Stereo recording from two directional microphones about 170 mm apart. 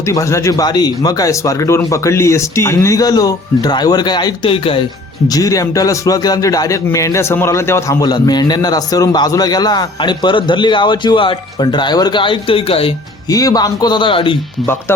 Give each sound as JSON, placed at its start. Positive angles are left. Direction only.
{"t": 0.0, "sound": "a man's voice", "side_deg": 20}
{"t": 5.3, "sound": "a man's voice", "side_deg": 20}
{"t": 13.2, "sound": "a man's voice", "side_deg": 20}
{"t": 14.9, "sound": "speech", "side_deg": 15}